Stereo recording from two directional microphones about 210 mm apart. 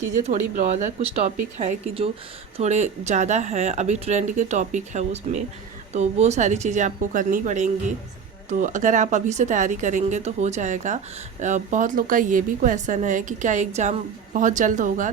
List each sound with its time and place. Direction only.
0.3 s speech: 35° right (ahead or behind)